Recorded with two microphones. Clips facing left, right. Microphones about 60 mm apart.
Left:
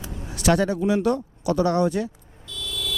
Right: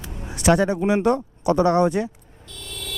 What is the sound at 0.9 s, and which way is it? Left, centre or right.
Speech, right.